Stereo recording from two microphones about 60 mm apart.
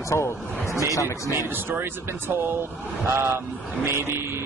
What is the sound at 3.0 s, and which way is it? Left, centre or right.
A man's voice, right.